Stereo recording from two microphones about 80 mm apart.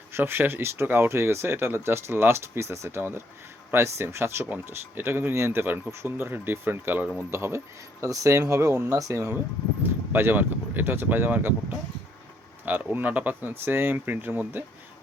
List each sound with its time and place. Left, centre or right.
0.1 s speech: right
9.8 s speech: right
12.6 s speech: right